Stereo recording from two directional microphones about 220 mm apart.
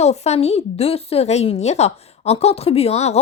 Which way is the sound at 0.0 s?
30° left (ahead or behind).